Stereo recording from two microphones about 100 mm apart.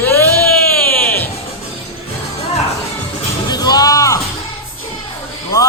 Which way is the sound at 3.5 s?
40° left (ahead or behind).